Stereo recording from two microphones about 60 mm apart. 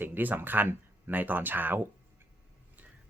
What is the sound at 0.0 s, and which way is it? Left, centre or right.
Speech, right.